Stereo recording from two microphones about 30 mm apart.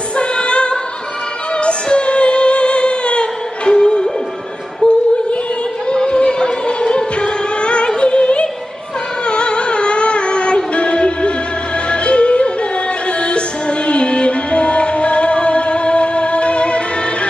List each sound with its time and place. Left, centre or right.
0.1 s music: left